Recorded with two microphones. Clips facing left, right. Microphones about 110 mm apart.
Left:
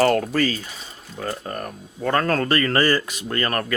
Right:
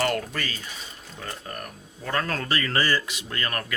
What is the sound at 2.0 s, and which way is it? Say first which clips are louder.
Speech: left 8 dB; 50° left (ahead or behind).